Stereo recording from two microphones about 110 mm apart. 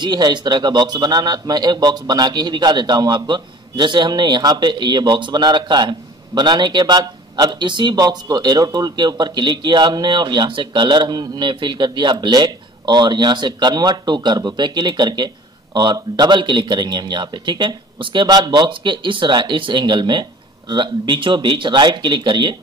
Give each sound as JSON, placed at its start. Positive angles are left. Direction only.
{"t": 0.0, "sound": "speech", "side_deg": -40}